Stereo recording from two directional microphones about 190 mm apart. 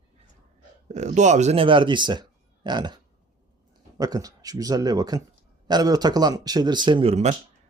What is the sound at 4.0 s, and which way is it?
Speech, 20° right (ahead or behind).